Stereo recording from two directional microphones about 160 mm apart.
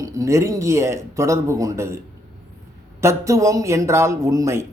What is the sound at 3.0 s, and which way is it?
A man's voice, 20° right (ahead or behind).